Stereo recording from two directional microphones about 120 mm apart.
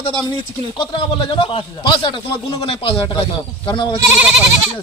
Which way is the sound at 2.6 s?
55° left (ahead or behind).